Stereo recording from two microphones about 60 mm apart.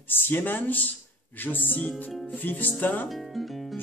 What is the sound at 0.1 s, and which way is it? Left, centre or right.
Speech, left.